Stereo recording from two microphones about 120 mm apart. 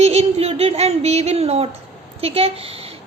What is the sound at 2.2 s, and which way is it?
Speech, 55° right (ahead or behind).